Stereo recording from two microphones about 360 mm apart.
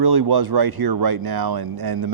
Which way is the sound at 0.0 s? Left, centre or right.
Right.